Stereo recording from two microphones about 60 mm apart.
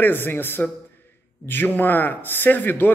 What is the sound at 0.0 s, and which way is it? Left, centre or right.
Speech, left.